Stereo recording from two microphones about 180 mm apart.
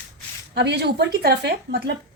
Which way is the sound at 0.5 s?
70° right (ahead or behind).